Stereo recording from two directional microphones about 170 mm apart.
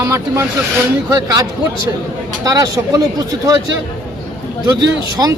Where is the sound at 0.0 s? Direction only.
20° right (ahead or behind).